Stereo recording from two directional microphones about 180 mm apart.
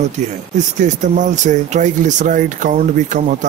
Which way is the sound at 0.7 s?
45° right (ahead or behind).